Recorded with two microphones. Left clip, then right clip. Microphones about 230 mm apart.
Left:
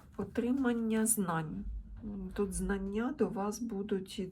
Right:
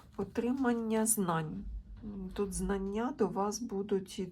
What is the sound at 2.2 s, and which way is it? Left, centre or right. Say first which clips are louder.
Speech: even; centre.